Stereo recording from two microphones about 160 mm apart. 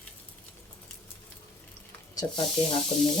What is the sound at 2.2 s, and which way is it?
Speech, 20° left (ahead or behind).